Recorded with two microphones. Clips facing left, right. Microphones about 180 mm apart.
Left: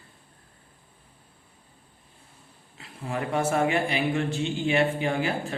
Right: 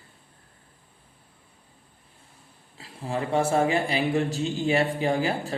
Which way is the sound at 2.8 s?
30° right (ahead or behind).